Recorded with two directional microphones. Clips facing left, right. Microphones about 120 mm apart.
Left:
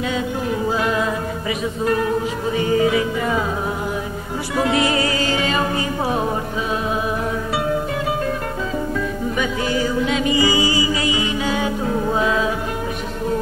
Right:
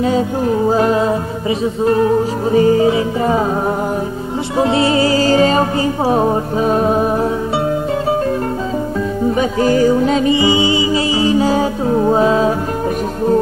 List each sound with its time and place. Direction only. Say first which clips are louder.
0.0 s music: right 7 dB; 35° right (ahead or behind)
4.6 s music: right 5 dB; 30° right (ahead or behind)
9.3 s music: right 9 dB; 35° right (ahead or behind)
10.3 s music: right 4 dB; 25° right (ahead or behind)